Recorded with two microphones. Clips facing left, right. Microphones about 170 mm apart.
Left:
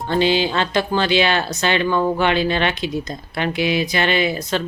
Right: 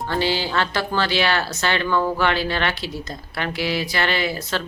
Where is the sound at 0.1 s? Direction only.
20° left (ahead or behind).